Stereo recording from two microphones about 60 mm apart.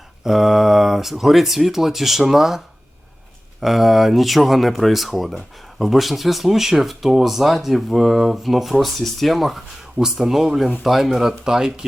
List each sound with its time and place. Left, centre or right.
0.3 s speech: centre
3.6 s speech: centre